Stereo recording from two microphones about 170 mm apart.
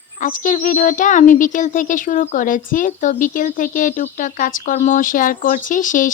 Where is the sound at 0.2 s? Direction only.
50° left (ahead or behind).